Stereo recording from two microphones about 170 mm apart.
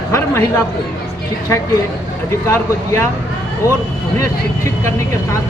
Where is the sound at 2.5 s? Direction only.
15° left (ahead or behind).